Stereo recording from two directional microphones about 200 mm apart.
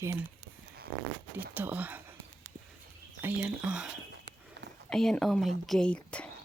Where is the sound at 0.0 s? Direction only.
15° right (ahead or behind).